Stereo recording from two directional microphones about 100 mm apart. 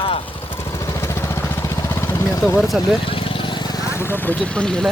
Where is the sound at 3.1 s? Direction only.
60° left (ahead or behind); by 3.9 s 45° left (ahead or behind).